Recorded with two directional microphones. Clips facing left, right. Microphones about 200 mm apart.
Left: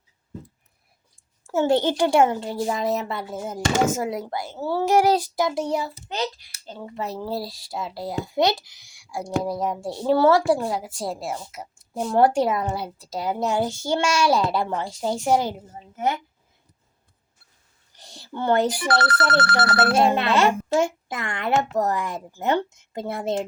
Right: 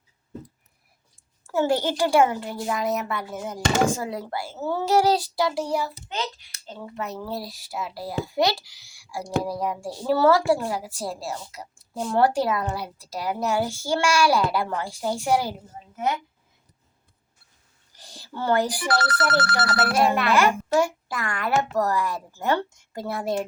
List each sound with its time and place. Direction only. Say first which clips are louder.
1.5 s speech: left 3 dB; 20° left (ahead or behind)
17.9 s speech: left 3 dB; 20° left (ahead or behind)
18.9 s speech: even; 55° left (ahead or behind)
19.8 s speech: left 2 dB; 25° left (ahead or behind)